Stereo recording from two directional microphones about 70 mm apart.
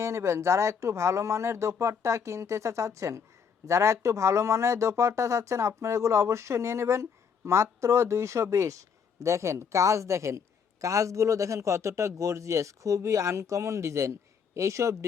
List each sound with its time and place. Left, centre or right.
0.0 s speech: right